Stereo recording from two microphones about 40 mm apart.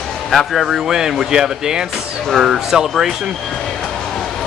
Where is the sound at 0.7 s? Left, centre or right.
Centre.